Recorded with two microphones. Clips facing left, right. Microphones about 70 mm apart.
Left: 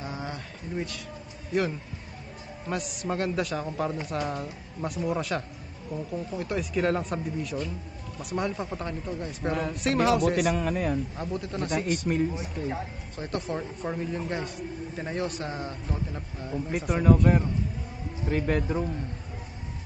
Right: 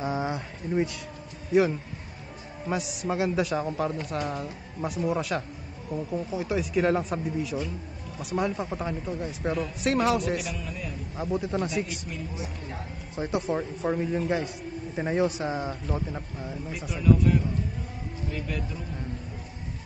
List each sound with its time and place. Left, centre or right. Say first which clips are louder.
1.5 s a man's voice: right 5 dB; centre
10.2 s speech: left 6 dB; left
11.1 s a man's voice: right 4 dB; centre
11.7 s speech: left 5 dB; left
13.1 s speech: right 5 dB; centre
13.4 s a man's voice: right 4 dB; centre
16.7 s speech: left 1 dB; left